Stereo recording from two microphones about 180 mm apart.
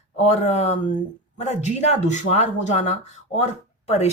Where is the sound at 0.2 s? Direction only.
40° left (ahead or behind).